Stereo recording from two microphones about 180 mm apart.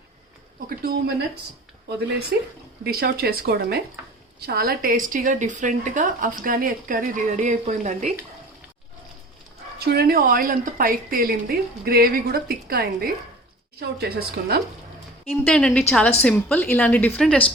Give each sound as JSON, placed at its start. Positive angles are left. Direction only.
{"t": 0.8, "sound": "speech", "side_deg": -55}
{"t": 2.3, "sound": "a woman's voice", "side_deg": -65}
{"t": 9.7, "sound": "a woman's voice", "side_deg": -60}
{"t": 15.3, "sound": "a woman's voice", "side_deg": 5}